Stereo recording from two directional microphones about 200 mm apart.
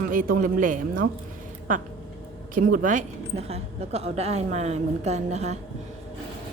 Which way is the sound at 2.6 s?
40° right (ahead or behind).